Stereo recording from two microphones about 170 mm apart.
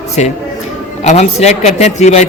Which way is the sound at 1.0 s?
40° left (ahead or behind).